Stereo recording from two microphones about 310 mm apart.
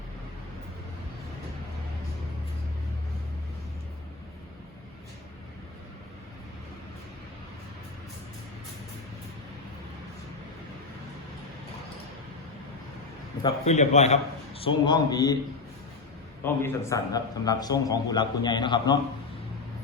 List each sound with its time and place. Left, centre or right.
13.4 s a man's voice: left
16.4 s a man's voice: centre